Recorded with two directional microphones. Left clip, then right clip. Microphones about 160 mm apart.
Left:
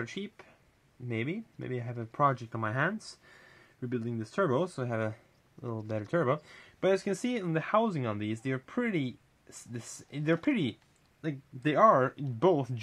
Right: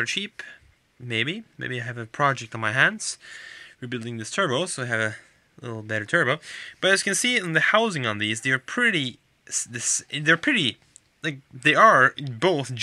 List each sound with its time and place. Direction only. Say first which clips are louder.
0.0 s speech: right 13 dB; 10° right (ahead or behind)
2.9 s speech: right 9 dB; 25° right (ahead or behind)
3.8 s speech: right 3 dB; 10° right (ahead or behind)